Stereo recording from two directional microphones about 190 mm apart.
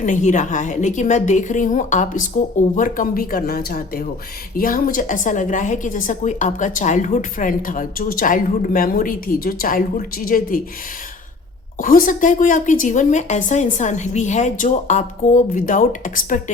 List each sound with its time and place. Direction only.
0.0 s a woman's voice: 40° left (ahead or behind)
11.8 s a woman's voice: 45° left (ahead or behind)